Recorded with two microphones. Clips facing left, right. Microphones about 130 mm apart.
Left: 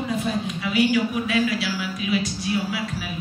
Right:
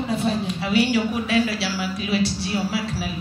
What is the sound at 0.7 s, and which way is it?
Music, 30° right (ahead or behind).